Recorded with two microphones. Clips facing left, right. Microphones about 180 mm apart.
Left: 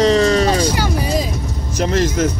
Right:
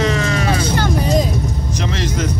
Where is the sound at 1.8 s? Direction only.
45° left (ahead or behind).